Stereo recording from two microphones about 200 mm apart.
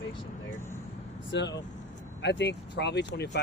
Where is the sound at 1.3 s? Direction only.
60° left (ahead or behind).